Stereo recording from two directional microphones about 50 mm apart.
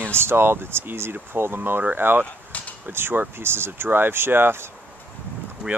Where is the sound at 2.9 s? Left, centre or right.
Right.